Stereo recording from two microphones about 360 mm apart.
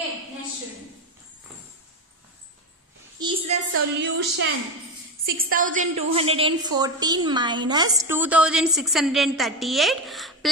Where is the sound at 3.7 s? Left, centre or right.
Right.